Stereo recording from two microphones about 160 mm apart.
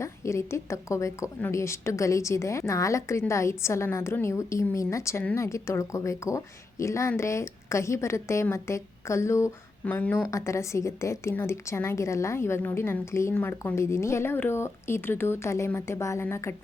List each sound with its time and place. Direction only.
0.0 s a woman's voice: 20° left (ahead or behind)